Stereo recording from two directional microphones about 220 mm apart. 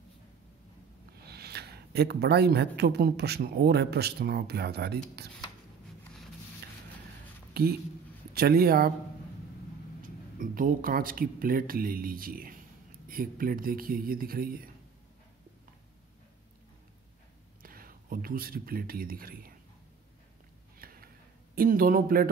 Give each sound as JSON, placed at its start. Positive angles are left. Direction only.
{"t": 1.1, "sound": "speech", "side_deg": -45}
{"t": 8.4, "sound": "speech", "side_deg": -45}
{"t": 10.0, "sound": "speech", "side_deg": -40}
{"t": 17.6, "sound": "speech", "side_deg": -40}
{"t": 20.8, "sound": "a sound", "side_deg": -40}
{"t": 21.5, "sound": "speech", "side_deg": -40}